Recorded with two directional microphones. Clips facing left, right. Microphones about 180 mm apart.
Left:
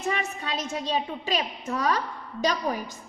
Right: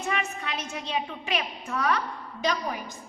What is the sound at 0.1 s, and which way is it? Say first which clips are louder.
A woman's voice: left 1 dB; 35° left (ahead or behind).